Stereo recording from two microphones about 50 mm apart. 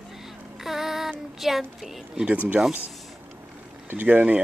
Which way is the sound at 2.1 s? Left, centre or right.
Right.